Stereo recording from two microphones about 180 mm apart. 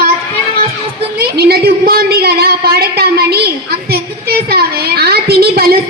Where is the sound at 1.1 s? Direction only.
60° right (ahead or behind).